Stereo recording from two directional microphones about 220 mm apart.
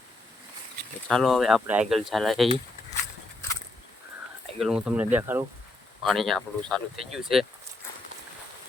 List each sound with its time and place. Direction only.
1.0 s speech: centre (ahead or behind)
4.6 s speech: 5° right (ahead or behind)
6.0 s speech: centre (ahead or behind)